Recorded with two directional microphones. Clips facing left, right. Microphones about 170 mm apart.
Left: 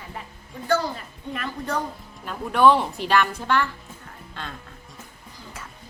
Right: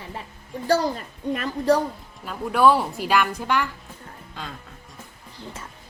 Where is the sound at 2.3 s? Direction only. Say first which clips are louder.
Even; 5° right (ahead or behind).